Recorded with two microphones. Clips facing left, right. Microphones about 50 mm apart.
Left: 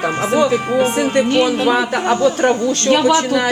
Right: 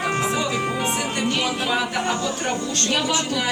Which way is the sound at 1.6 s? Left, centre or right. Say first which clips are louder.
Left 8 dB; left.